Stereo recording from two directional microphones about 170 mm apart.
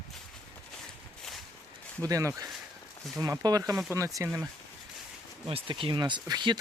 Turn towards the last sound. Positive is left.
turn(degrees=-25)  # may be behind; listen again after turning